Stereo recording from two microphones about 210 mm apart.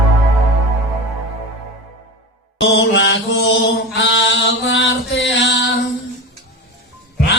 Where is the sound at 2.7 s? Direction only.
60° left (ahead or behind).